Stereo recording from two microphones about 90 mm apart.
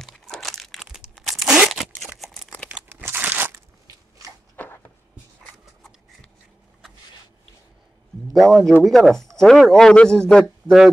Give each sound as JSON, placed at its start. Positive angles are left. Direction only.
{"t": 0.0, "sound": "crumpling", "side_deg": 5}
{"t": 1.1, "sound": "tearing", "side_deg": 0}
{"t": 2.1, "sound": "a sound", "side_deg": 0}
{"t": 2.7, "sound": "crunch", "side_deg": -25}
{"t": 3.5, "sound": "crunch", "side_deg": -35}
{"t": 4.6, "sound": "a sound", "side_deg": 20}
{"t": 8.3, "sound": "a man's voice", "side_deg": 0}
{"t": 10.4, "sound": "speech", "side_deg": -5}